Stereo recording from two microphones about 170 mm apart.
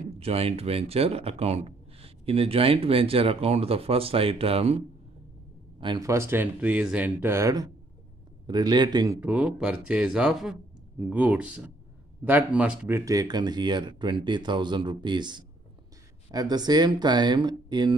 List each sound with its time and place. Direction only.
0.2 s speech: 35° right (ahead or behind)
6.0 s speech: 15° right (ahead or behind)
9.2 s speech: 10° right (ahead or behind); by 17.9 s 25° right (ahead or behind)